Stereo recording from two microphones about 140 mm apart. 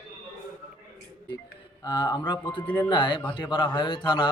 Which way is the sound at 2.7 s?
35° left (ahead or behind).